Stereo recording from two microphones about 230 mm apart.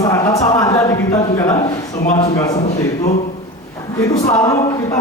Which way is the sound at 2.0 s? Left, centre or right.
Left.